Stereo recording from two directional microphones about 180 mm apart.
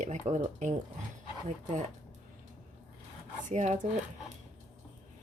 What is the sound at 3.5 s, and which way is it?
Speech, 40° right (ahead or behind).